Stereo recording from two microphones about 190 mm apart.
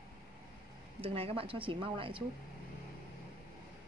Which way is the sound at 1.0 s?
30° right (ahead or behind).